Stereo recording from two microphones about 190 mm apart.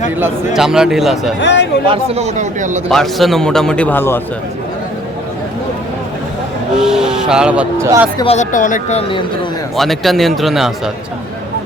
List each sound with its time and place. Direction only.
0.2 s a man's voice: 5° right (ahead or behind)
1.4 s speech: 65° left (ahead or behind)
1.9 s a man's voice: 35° right (ahead or behind)
2.9 s a man's voice: centre (ahead or behind)
6.7 s a man's voice: 5° right (ahead or behind)
8.2 s speech: 35° left (ahead or behind)
9.7 s a man's voice: centre (ahead or behind)